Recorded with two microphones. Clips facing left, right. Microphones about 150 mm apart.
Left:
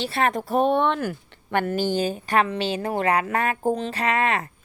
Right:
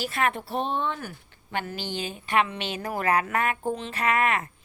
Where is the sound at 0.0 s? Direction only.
35° left (ahead or behind).